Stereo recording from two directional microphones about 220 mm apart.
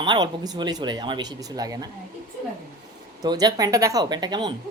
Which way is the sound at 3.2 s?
20° right (ahead or behind).